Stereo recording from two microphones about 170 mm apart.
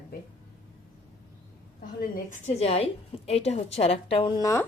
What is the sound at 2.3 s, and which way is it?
A woman's voice, 40° left (ahead or behind).